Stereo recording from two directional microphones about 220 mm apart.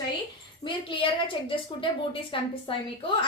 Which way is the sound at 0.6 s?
25° left (ahead or behind).